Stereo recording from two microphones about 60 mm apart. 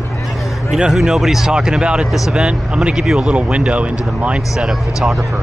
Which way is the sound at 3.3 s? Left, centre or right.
Centre.